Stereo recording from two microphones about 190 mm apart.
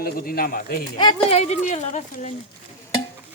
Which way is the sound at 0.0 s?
50° left (ahead or behind).